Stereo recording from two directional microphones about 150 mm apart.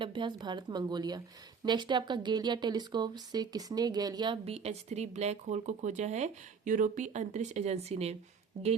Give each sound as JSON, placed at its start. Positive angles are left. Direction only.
{"t": 0.0, "sound": "speech", "side_deg": -35}
{"t": 4.4, "sound": "speech", "side_deg": -45}